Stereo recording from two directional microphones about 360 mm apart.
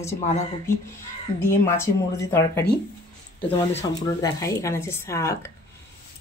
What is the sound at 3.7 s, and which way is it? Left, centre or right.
Speech, centre.